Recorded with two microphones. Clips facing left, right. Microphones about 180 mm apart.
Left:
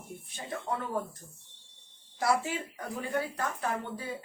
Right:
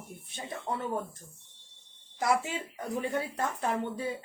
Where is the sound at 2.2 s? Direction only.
20° right (ahead or behind).